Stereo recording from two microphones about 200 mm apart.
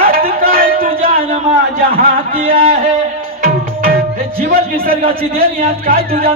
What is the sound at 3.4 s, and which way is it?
Tabla, 45° right (ahead or behind).